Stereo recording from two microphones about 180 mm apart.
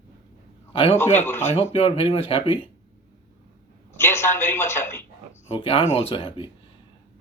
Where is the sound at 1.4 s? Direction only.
35° left (ahead or behind).